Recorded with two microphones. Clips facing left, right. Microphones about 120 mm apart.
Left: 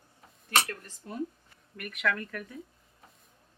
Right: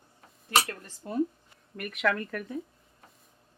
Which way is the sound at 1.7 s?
30° right (ahead or behind).